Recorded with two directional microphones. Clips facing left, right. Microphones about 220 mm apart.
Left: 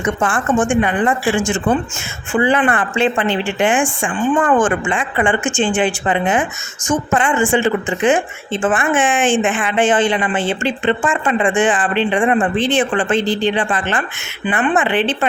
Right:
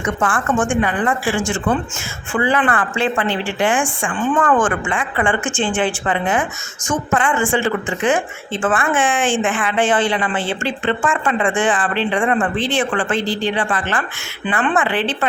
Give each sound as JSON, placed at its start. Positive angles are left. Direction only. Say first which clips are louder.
{"t": 0.0, "sound": "a woman's voice", "louder": "left 2 dB", "side_deg": 25}